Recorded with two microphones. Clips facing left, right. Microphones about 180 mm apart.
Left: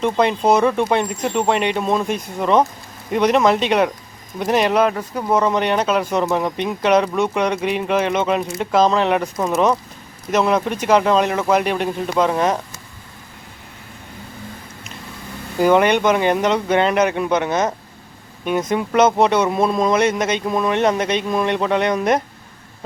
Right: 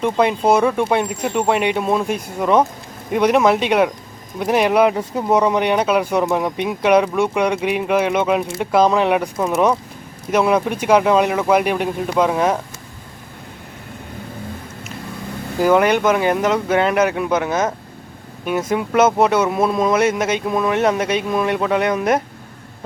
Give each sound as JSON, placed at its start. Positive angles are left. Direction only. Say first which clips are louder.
{"t": 0.0, "sound": "speech", "louder": "even", "side_deg": -10}
{"t": 4.9, "sound": "speech", "louder": "right 2 dB", "side_deg": -25}
{"t": 5.4, "sound": "speech", "louder": "even", "side_deg": -10}
{"t": 15.6, "sound": "speech", "louder": "even", "side_deg": 0}